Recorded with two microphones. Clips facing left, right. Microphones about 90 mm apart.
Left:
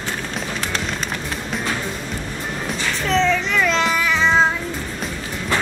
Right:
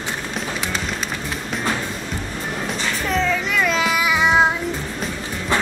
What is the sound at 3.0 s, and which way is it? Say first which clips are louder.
Child singing: left 3 dB; 5° right (ahead or behind).